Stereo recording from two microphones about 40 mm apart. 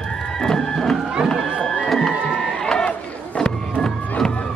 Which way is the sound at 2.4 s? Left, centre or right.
Centre.